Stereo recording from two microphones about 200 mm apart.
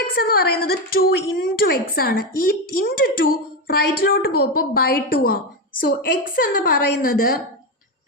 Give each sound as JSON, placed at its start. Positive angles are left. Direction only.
{"t": 0.1, "sound": "a woman's voice", "side_deg": 45}